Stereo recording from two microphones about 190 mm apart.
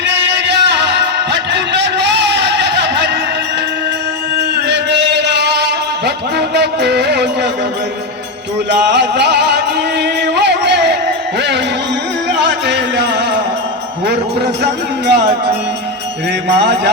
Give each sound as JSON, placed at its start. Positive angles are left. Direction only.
{"t": 0.0, "sound": "music", "side_deg": -70}
{"t": 4.5, "sound": "music", "side_deg": -65}
{"t": 8.7, "sound": "music", "side_deg": -65}
{"t": 14.0, "sound": "a man's voice", "side_deg": -60}
{"t": 16.6, "sound": "music", "side_deg": -65}